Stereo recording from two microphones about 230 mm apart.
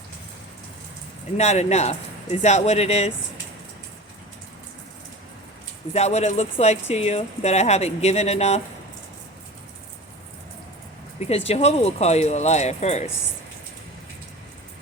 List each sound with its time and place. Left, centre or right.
1.4 s speech: left
5.9 s speech: left
11.2 s speech: left